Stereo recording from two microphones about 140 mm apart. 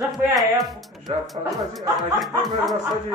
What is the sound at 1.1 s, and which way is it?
Speech, 45° right (ahead or behind).